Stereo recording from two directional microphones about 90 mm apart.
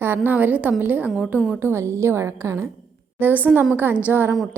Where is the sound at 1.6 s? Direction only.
30° right (ahead or behind).